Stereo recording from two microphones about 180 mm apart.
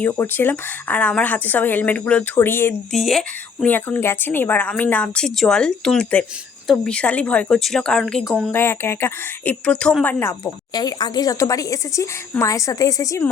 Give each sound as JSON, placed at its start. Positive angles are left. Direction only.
{"t": 0.0, "sound": "a woman's voice", "side_deg": 10}
{"t": 2.9, "sound": "a woman's voice", "side_deg": 0}
{"t": 8.5, "sound": "a woman's voice", "side_deg": 15}